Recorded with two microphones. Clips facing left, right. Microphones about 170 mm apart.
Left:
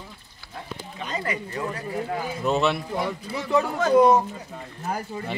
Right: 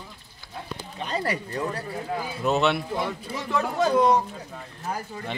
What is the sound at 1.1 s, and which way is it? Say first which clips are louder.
Speech: right 2 dB; 35° right (ahead or behind).